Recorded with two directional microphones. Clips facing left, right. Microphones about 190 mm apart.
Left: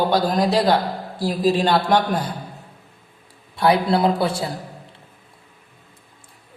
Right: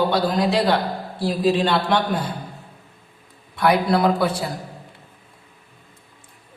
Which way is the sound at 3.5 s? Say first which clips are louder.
Left 1 dB; 30° left (ahead or behind).